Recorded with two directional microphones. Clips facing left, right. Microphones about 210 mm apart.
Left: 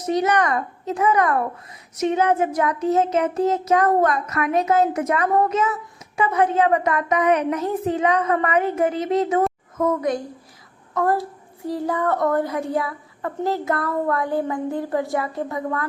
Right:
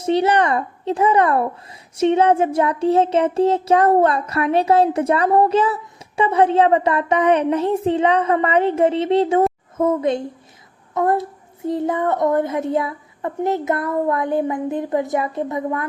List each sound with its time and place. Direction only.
0.0 s speech: 30° right (ahead or behind)